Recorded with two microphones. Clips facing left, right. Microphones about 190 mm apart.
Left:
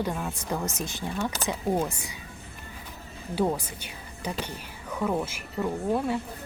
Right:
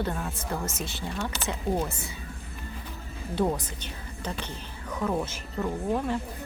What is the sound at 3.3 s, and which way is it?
A woman's voice, 5° left (ahead or behind).